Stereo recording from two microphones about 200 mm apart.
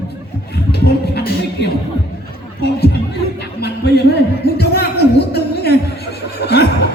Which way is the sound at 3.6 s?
55° left (ahead or behind).